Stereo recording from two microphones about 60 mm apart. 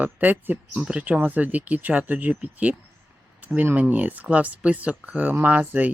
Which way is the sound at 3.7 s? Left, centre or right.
Right.